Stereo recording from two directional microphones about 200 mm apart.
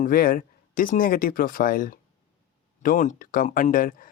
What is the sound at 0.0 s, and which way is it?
Speech, 45° left (ahead or behind).